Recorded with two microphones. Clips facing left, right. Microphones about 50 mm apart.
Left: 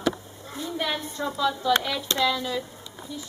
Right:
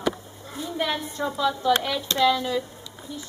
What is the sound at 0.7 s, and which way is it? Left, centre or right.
Speech, centre.